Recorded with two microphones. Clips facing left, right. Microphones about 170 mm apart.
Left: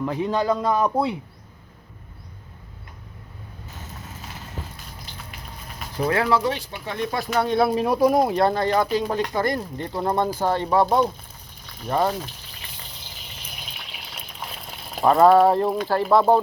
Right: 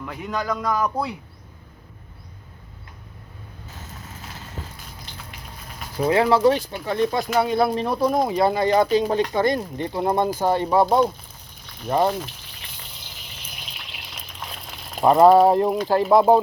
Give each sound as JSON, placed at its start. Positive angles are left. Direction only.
{"t": 0.0, "sound": "a man's voice", "side_deg": 30}
{"t": 6.1, "sound": "speech", "side_deg": -25}
{"t": 7.3, "sound": "speech", "side_deg": -5}
{"t": 8.6, "sound": "speech", "side_deg": -20}
{"t": 15.0, "sound": "speech", "side_deg": -10}